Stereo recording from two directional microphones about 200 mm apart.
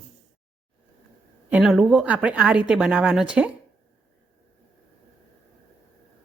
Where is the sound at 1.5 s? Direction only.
5° right (ahead or behind).